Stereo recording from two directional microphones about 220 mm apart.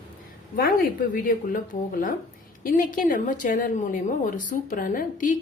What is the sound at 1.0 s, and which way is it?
Speech, 40° left (ahead or behind).